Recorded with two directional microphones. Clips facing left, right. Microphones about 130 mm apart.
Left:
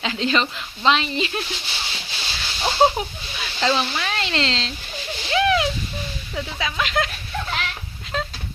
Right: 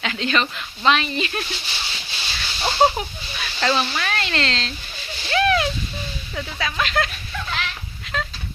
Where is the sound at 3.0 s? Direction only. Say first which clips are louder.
Left 1 dB; 20° left (ahead or behind).